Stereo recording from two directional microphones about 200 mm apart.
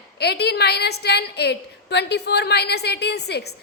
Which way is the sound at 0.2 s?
55° left (ahead or behind).